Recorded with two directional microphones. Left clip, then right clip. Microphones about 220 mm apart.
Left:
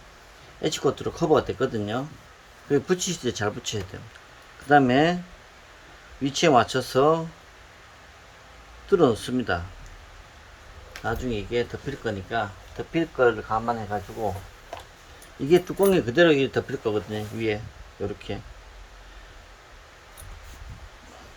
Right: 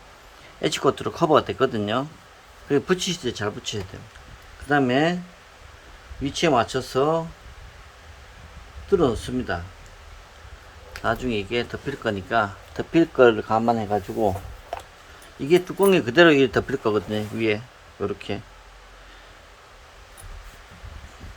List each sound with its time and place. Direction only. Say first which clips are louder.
0.6 s speech: right 3 dB; 10° right (ahead or behind)
6.2 s speech: left 1 dB; centre (ahead or behind)
8.9 s speech: left 1 dB; centre (ahead or behind)
11.0 s speech: right 4 dB; 10° right (ahead or behind); by 14.0 s 45° right (ahead or behind)
15.4 s speech: right 2 dB; centre (ahead or behind)